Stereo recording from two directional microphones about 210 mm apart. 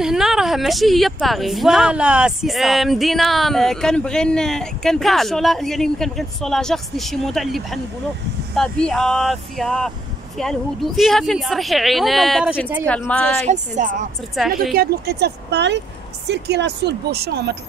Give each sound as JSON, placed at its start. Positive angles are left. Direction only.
{"t": 0.0, "sound": "a woman's voice", "side_deg": 0}
{"t": 12.8, "sound": "a woman's voice", "side_deg": 5}
{"t": 13.5, "sound": "speech", "side_deg": -35}